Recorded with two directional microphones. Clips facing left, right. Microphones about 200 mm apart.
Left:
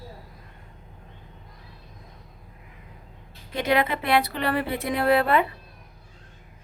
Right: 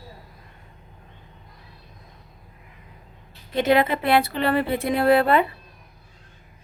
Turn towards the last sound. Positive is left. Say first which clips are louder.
# right 3 dB
turn(degrees=-30)  # may be behind; listen again after turning